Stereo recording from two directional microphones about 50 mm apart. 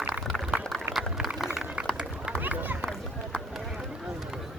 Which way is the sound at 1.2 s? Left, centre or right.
Centre.